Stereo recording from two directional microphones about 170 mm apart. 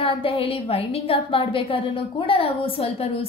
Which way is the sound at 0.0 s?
30° left (ahead or behind).